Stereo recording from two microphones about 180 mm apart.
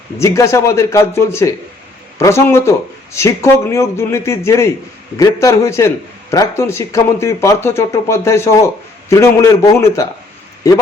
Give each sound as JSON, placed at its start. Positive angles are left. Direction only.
{"t": 0.2, "sound": "speech", "side_deg": 15}